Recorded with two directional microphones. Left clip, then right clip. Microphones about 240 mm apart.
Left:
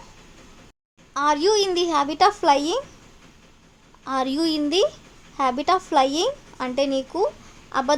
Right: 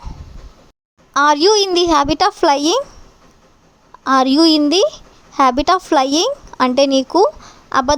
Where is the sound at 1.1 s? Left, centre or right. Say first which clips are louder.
Right 8 dB; right.